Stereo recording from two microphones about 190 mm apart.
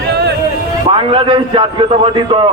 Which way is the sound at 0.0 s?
60° right (ahead or behind).